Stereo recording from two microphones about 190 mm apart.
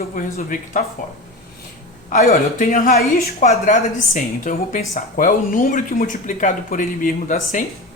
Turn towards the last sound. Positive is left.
turn(degrees=45)  # may be behind; listen again after turning